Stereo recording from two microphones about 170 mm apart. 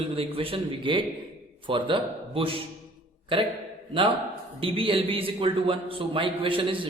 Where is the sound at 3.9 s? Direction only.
30° right (ahead or behind).